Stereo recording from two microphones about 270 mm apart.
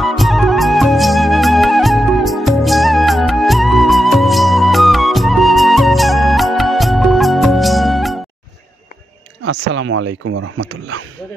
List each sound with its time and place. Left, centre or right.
0.0 s music: centre
9.4 s speech: right